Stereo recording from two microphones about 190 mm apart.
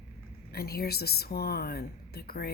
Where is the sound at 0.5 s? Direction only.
55° left (ahead or behind).